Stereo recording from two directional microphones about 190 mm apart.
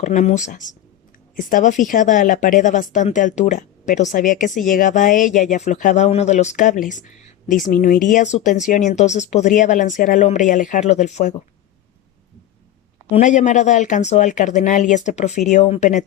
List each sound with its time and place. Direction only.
0.0 s speech: 40° left (ahead or behind)
13.1 s speech: 40° left (ahead or behind)